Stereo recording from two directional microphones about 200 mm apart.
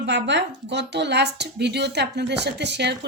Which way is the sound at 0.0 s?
60° right (ahead or behind).